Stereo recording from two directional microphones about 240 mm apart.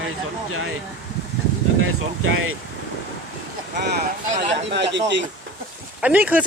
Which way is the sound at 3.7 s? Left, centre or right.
Right.